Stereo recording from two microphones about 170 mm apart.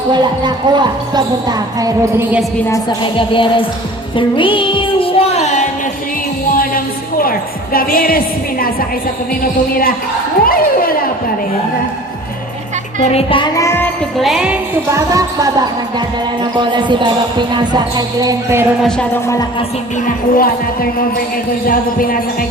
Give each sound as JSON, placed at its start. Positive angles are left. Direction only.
{"t": 0.1, "sound": "speech", "side_deg": -25}
{"t": 3.0, "sound": "speech", "side_deg": 30}
{"t": 4.2, "sound": "music", "side_deg": 30}
{"t": 6.5, "sound": "music", "side_deg": 55}
{"t": 9.4, "sound": "speech", "side_deg": 60}
{"t": 13.1, "sound": "speech", "side_deg": 30}
{"t": 13.6, "sound": "music", "side_deg": 15}
{"t": 14.2, "sound": "jingle bell", "side_deg": 0}
{"t": 14.9, "sound": "speech", "side_deg": -20}
{"t": 18.8, "sound": "jingle bell", "side_deg": 5}
{"t": 20.3, "sound": "speech", "side_deg": 55}